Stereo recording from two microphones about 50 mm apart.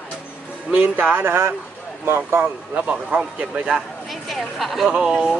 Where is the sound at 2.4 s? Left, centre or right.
Right.